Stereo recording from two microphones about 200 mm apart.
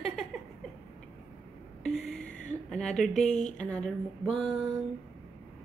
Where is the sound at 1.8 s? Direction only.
Centre (ahead or behind).